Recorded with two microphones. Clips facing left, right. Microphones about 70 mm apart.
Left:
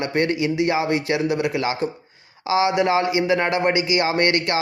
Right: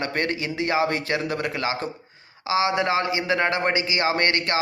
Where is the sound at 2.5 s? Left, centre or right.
Right.